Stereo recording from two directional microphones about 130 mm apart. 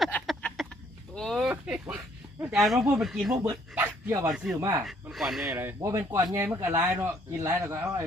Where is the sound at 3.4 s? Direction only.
25° right (ahead or behind).